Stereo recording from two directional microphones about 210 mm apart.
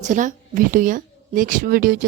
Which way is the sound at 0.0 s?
35° right (ahead or behind).